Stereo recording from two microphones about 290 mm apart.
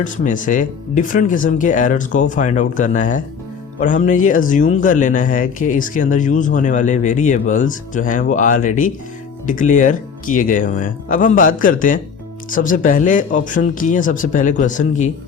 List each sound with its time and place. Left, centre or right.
0.0 s speech: left